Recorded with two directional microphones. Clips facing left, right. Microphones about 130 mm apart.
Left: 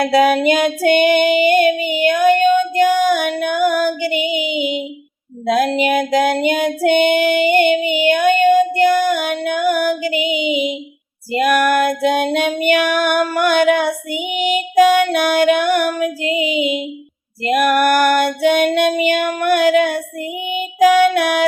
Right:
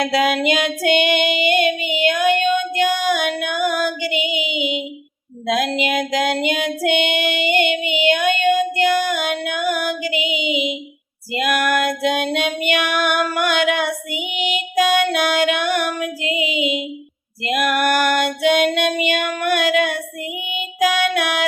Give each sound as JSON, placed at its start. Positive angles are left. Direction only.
{"t": 0.0, "sound": "child singing", "side_deg": 40}
{"t": 11.3, "sound": "female singing", "side_deg": 40}
{"t": 12.5, "sound": "child singing", "side_deg": 40}
{"t": 17.4, "sound": "female singing", "side_deg": 40}
{"t": 20.5, "sound": "music", "side_deg": 40}